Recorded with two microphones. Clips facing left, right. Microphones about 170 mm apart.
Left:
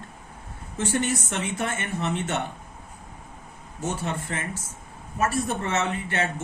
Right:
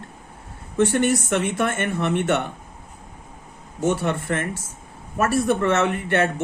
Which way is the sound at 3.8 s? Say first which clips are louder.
Right 8 dB; 65° right (ahead or behind).